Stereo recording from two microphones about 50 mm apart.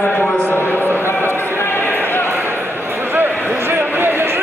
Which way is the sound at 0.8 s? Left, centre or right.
Right.